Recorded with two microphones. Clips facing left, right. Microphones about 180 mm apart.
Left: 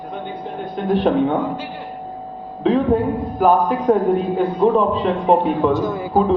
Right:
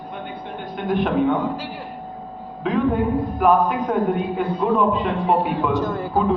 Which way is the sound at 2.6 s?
35° left (ahead or behind).